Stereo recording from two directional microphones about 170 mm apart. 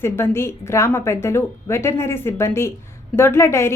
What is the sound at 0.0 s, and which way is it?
A woman's voice, 15° left (ahead or behind).